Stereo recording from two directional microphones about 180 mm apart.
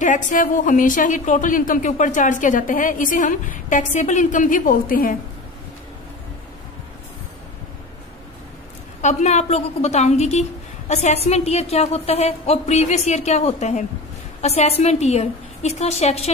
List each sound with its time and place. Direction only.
0.0 s a woman's voice: 45° left (ahead or behind)
9.0 s a woman's voice: 40° left (ahead or behind)